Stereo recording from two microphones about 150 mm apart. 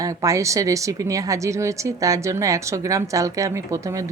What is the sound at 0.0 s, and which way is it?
A woman's voice, 20° right (ahead or behind).